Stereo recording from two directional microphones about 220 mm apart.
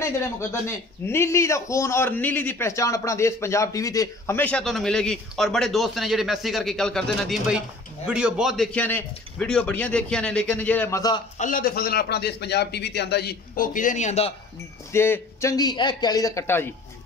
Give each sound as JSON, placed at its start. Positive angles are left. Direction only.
{"t": 0.0, "sound": "a man's voice", "side_deg": 10}
{"t": 11.3, "sound": "a man's voice", "side_deg": 35}
{"t": 14.9, "sound": "a man's voice", "side_deg": 10}